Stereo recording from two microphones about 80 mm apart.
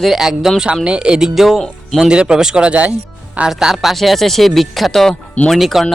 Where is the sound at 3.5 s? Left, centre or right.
Centre.